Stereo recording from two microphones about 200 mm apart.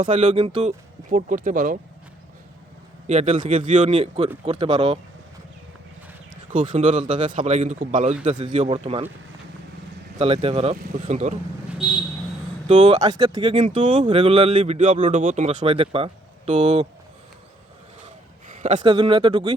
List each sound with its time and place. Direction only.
0.0 s a man's voice: 35° right (ahead or behind)
1.1 s a man's voice: 40° right (ahead or behind)
3.1 s a man's voice: 35° right (ahead or behind)
6.6 s a man's voice: 25° right (ahead or behind)
10.2 s speech: 30° right (ahead or behind)
12.6 s speech: 35° right (ahead or behind)
13.0 s speech: 20° right (ahead or behind)
13.6 s a man's voice: 35° right (ahead or behind)
18.4 s a sound: 35° right (ahead or behind)
18.8 s speech: 25° right (ahead or behind)